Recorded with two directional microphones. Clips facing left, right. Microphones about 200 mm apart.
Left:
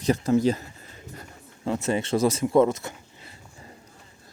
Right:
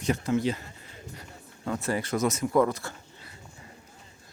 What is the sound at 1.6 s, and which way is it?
Speech, 25° left (ahead or behind).